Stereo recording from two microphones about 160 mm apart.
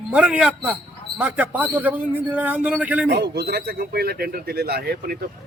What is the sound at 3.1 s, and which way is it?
Speech, 90° right.